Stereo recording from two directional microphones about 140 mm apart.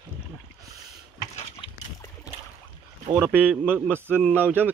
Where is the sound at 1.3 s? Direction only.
45° left (ahead or behind).